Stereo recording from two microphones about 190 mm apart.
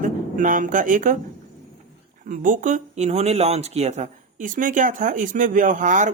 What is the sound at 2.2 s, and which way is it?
Speech, 45° right (ahead or behind).